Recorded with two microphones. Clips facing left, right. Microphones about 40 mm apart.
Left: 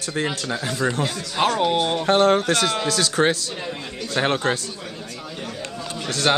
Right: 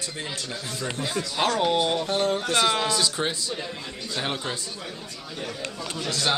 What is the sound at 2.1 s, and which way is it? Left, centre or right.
Speech, left.